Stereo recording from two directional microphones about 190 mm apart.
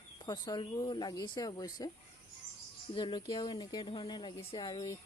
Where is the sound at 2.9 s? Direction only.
25° left (ahead or behind).